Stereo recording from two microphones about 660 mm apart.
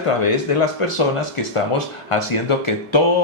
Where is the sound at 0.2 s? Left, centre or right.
Left.